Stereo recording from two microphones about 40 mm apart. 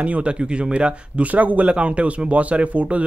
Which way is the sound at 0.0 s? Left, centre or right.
Right.